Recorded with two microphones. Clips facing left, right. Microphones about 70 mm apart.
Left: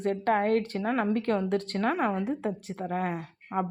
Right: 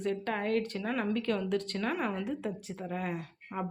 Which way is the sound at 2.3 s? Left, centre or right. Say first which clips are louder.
Left 5 dB; left.